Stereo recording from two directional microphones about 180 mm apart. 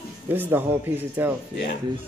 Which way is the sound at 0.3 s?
10° right (ahead or behind).